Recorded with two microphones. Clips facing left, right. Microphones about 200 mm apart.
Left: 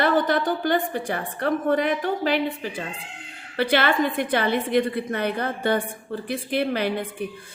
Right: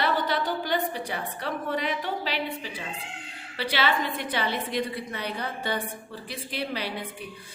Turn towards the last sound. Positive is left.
turn(degrees=50)  # may be behind; listen again after turning